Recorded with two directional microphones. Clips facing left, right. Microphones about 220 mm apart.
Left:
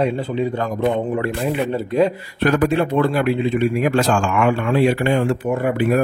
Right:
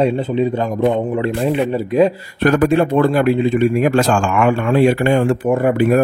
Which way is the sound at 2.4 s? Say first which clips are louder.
Right 4 dB; 50° right (ahead or behind).